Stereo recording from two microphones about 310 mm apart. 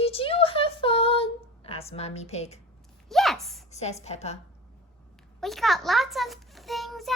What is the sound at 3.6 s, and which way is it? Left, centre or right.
Speech, left.